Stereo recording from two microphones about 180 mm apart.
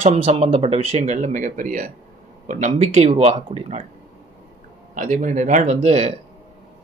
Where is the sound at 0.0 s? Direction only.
35° right (ahead or behind).